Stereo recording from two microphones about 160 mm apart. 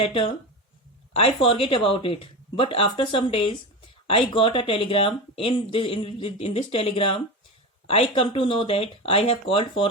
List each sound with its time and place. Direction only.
0.0 s speech: 35° left (ahead or behind)